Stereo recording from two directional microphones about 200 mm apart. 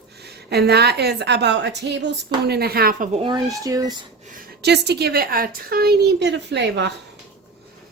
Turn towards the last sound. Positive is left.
turn(degrees=-60)  # may be behind; listen again after turning